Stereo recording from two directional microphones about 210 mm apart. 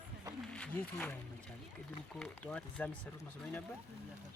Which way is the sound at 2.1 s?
5° left (ahead or behind).